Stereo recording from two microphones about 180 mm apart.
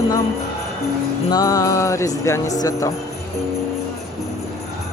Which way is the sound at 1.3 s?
20° left (ahead or behind).